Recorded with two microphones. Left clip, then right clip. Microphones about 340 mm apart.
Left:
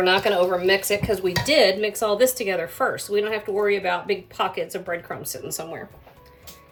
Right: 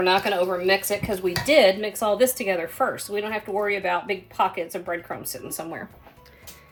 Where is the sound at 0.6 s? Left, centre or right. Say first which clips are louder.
Left 2 dB; centre.